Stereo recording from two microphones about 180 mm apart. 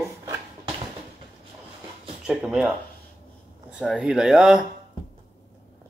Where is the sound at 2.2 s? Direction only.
5° right (ahead or behind).